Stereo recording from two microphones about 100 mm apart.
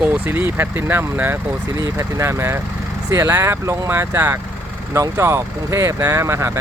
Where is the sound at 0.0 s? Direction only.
20° right (ahead or behind).